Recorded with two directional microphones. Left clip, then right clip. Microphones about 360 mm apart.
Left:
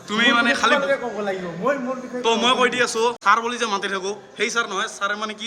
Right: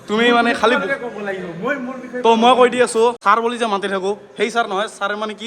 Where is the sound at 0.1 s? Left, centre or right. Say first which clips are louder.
Right 3 dB; centre.